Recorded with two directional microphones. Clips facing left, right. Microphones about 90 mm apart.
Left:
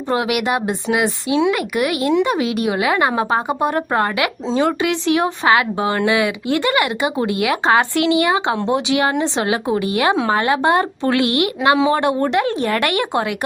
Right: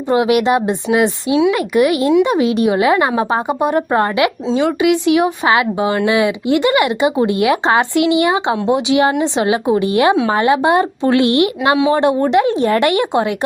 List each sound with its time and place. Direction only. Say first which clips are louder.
0.1 s speech: right 6 dB; 25° right (ahead or behind)
4.4 s speech: left 2 dB; centre (ahead or behind)
4.8 s speech: right 5 dB; 15° right (ahead or behind)